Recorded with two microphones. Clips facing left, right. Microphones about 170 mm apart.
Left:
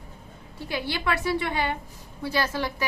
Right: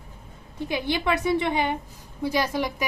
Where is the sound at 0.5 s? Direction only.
20° right (ahead or behind).